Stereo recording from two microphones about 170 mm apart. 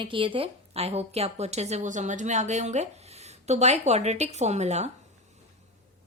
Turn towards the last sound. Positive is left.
turn(degrees=-40)  # may be behind; listen again after turning